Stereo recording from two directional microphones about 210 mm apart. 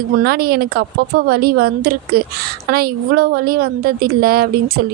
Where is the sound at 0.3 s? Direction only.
45° right (ahead or behind).